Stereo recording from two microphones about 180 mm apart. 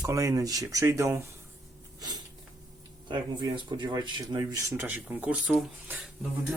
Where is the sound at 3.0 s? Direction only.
25° right (ahead or behind); by 6.0 s 5° right (ahead or behind).